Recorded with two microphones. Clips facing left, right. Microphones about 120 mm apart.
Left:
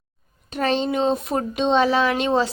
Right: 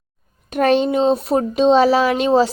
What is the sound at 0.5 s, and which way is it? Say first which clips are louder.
Speech: right 7 dB; 50° right (ahead or behind).